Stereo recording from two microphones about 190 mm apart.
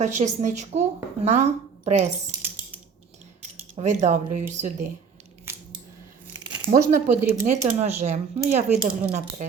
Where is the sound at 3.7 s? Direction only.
40° right (ahead or behind).